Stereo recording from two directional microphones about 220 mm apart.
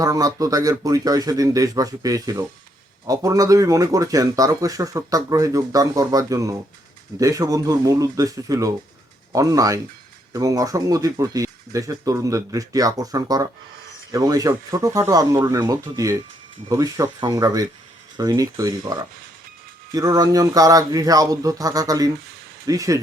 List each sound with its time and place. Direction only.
0.0 s speech: 15° right (ahead or behind)